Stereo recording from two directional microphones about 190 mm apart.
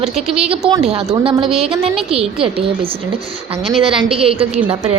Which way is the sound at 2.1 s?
30° right (ahead or behind).